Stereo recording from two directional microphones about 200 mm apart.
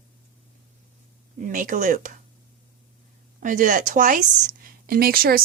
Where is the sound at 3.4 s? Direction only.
40° right (ahead or behind).